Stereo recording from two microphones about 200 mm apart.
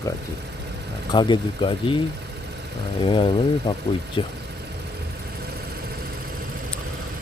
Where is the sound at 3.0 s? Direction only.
25° left (ahead or behind).